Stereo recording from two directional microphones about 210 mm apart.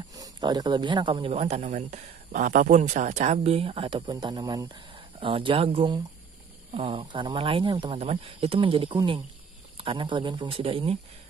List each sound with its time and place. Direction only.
0.1 s speech: 20° right (ahead or behind)